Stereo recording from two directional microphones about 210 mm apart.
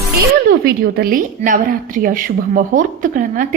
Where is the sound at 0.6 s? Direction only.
45° right (ahead or behind).